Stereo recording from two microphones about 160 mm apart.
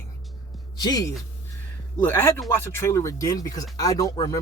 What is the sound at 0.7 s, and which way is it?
Speech, 25° left (ahead or behind).